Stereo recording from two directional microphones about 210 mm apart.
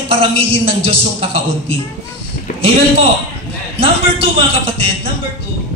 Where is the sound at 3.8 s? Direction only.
25° right (ahead or behind).